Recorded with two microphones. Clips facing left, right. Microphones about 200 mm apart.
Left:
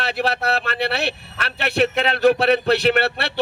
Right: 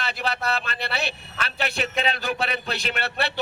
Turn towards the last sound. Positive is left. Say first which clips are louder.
# left 9 dB
turn(degrees=65)  # may be behind; listen again after turning